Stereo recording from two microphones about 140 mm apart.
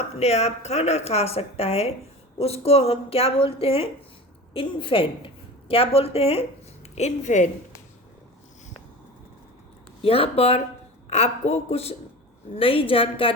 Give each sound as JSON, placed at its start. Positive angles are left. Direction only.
{"t": 0.2, "sound": "a woman's voice", "side_deg": 50}
{"t": 6.9, "sound": "a woman's voice", "side_deg": 55}
{"t": 10.0, "sound": "a woman's voice", "side_deg": 40}